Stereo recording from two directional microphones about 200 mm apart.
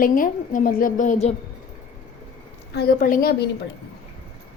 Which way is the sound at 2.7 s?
45° left (ahead or behind).